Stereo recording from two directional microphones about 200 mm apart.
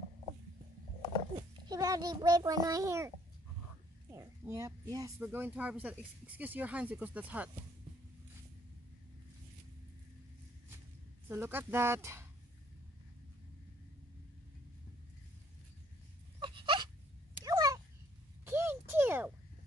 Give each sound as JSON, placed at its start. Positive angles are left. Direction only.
{"t": 1.7, "sound": "speech", "side_deg": -20}
{"t": 4.1, "sound": "speech", "side_deg": -15}
{"t": 11.2, "sound": "speech", "side_deg": -10}
{"t": 16.3, "sound": "a sound", "side_deg": -25}
{"t": 17.5, "sound": "cat", "side_deg": -15}
{"t": 18.4, "sound": "a sound", "side_deg": -10}